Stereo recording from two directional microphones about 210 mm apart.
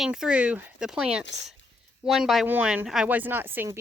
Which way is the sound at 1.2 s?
55° left (ahead or behind).